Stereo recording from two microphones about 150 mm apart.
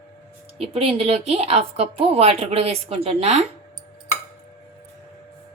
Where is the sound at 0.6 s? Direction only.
40° right (ahead or behind).